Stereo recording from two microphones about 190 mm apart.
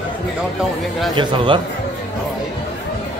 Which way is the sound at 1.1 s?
25° right (ahead or behind).